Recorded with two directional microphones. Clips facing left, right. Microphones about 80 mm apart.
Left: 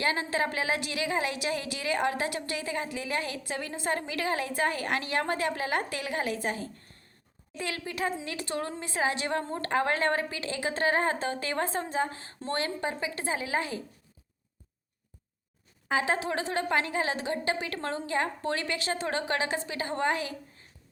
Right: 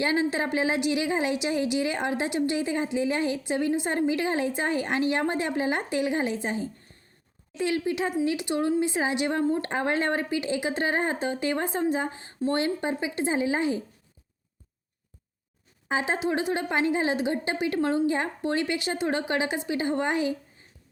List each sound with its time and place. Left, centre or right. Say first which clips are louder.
0.0 s a woman's voice: right 3 dB; right
15.9 s a woman's voice: right 2 dB; right